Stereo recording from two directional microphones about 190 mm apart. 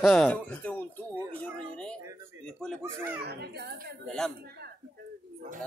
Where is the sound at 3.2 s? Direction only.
60° right (ahead or behind).